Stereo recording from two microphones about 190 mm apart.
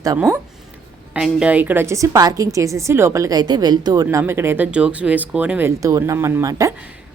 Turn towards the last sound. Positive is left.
turn(degrees=-15)  # may be behind; listen again after turning